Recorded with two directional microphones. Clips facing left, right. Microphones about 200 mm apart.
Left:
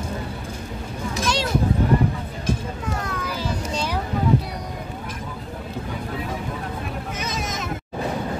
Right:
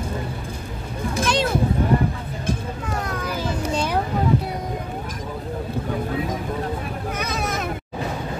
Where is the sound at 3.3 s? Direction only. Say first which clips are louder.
Right 4 dB; 50° right (ahead or behind).